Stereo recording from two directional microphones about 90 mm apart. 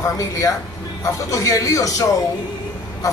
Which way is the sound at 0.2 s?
40° left (ahead or behind).